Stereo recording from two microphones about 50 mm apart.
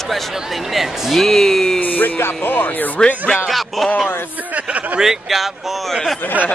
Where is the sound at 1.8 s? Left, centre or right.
Left.